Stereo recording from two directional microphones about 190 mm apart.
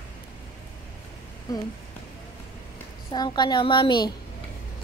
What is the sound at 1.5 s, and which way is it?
Speech, 20° left (ahead or behind).